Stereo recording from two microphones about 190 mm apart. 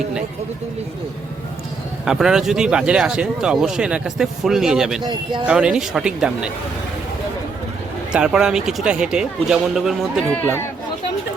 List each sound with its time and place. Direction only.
2.0 s speech: 5° right (ahead or behind)
5.0 s speech: 25° right (ahead or behind)
5.5 s speech: 5° right (ahead or behind)
8.1 s speech: 5° right (ahead or behind)